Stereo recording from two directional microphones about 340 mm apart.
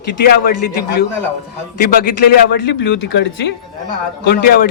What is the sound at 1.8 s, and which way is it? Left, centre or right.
A man's voice, left.